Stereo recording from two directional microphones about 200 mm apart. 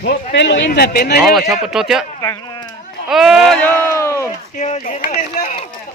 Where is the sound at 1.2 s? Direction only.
Centre (ahead or behind).